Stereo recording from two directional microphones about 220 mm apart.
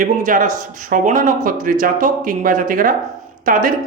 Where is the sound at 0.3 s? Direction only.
35° right (ahead or behind).